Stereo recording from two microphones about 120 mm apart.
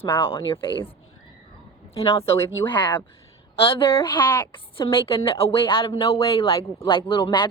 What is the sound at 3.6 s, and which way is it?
Speech, 50° left (ahead or behind).